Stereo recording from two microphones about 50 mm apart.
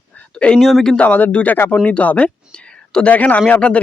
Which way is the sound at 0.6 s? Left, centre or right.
Centre.